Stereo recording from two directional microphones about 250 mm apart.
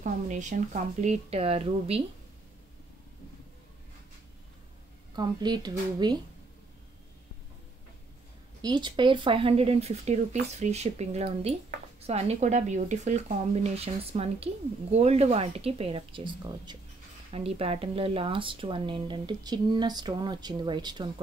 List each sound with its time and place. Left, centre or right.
0.0 s speech: right
5.1 s speech: centre
8.6 s speech: centre